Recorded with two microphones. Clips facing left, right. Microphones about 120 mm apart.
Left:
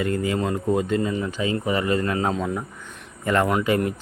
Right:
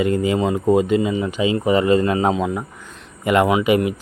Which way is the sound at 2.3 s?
5° right (ahead or behind).